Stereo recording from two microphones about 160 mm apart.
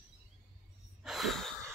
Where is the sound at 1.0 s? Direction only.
Centre (ahead or behind).